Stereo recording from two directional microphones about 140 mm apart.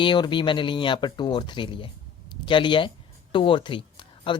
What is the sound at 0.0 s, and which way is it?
Speech, 35° left (ahead or behind).